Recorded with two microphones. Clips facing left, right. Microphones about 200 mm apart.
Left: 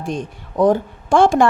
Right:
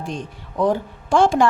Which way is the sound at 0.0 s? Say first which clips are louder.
Left 4 dB; 50° left (ahead or behind).